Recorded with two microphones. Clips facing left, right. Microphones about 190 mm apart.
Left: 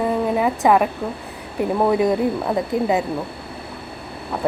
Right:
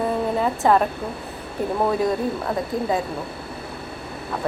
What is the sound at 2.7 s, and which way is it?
Speech, 20° left (ahead or behind).